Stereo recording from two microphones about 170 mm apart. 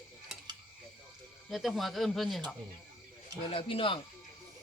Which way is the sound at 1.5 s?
Centre (ahead or behind).